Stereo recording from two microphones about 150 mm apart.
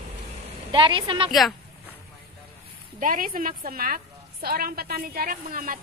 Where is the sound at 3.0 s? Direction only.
65° right (ahead or behind).